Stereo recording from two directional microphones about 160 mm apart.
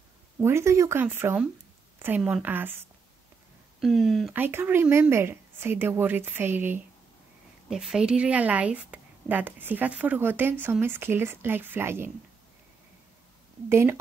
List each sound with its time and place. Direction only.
0.4 s a woman's voice: 15° right (ahead or behind)
3.8 s speech: centre (ahead or behind)
4.3 s a woman's voice: 15° right (ahead or behind)
13.7 s a woman's voice: 15° right (ahead or behind)